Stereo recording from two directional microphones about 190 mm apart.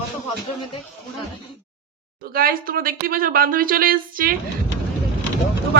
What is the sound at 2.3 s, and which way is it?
Speech, 50° right (ahead or behind).